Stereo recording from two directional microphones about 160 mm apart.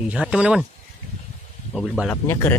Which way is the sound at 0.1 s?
5° right (ahead or behind).